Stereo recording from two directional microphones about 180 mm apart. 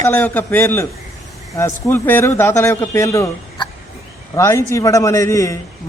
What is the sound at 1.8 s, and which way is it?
A man's voice, 10° left (ahead or behind).